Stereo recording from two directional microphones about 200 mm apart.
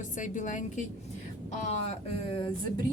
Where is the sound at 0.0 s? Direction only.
40° left (ahead or behind).